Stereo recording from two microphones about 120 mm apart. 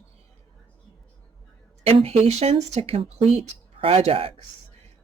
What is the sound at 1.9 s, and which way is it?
Speech, 55° right (ahead or behind).